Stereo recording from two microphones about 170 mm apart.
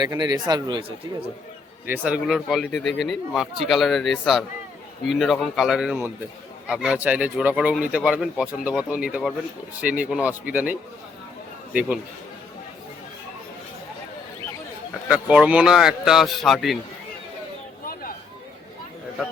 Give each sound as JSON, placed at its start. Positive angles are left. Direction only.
{"t": 0.0, "sound": "speech", "side_deg": -25}
{"t": 1.9, "sound": "a man's voice", "side_deg": -5}
{"t": 15.1, "sound": "speech", "side_deg": -5}